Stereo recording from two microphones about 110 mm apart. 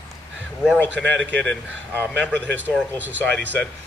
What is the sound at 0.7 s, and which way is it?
A man's voice, 15° left (ahead or behind).